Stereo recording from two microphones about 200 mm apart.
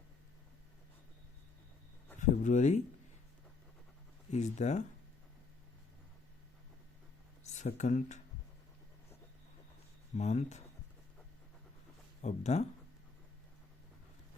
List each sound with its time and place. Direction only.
2.1 s speech: 40° left (ahead or behind)
4.3 s speech: 35° left (ahead or behind)
7.5 s speech: 35° left (ahead or behind)
10.2 s speech: 35° left (ahead or behind)
12.2 s speech: 35° left (ahead or behind)